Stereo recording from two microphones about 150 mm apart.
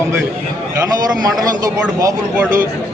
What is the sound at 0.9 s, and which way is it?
Speech, 25° right (ahead or behind).